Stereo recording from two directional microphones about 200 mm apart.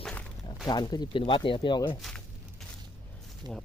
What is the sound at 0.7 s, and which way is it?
Speech, 20° left (ahead or behind).